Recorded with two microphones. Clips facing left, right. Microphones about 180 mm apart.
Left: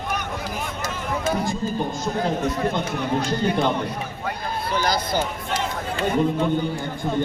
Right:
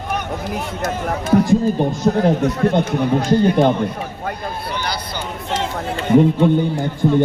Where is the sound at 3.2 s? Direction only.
40° right (ahead or behind).